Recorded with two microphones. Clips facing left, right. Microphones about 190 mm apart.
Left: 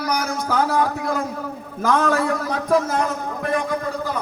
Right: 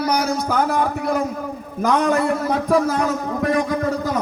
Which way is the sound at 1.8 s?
20° right (ahead or behind).